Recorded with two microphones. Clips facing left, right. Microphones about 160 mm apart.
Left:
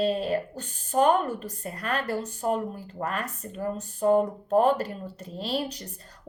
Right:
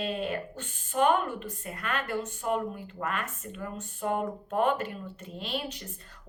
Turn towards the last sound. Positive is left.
turn(degrees=35)  # may be behind; listen again after turning